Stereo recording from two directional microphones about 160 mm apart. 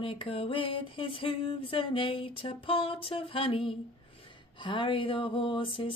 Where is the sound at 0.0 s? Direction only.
35° left (ahead or behind).